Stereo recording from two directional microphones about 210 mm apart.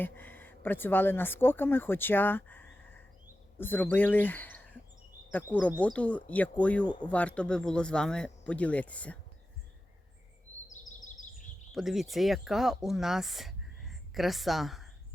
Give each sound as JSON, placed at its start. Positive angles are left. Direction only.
{"t": 0.0, "sound": "speech", "side_deg": 10}
{"t": 10.7, "sound": "a sound", "side_deg": 35}
{"t": 11.7, "sound": "speech", "side_deg": 0}